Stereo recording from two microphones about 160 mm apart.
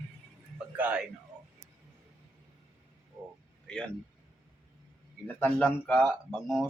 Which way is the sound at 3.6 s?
5° left (ahead or behind).